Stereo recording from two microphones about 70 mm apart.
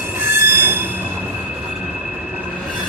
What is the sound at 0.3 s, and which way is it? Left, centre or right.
Train wheels squealing, right.